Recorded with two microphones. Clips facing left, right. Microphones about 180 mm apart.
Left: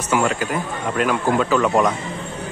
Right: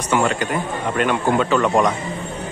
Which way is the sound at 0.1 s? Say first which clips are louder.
Right 1 dB; 5° left (ahead or behind).